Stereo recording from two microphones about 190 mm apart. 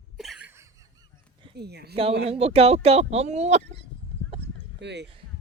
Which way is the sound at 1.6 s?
60° right (ahead or behind).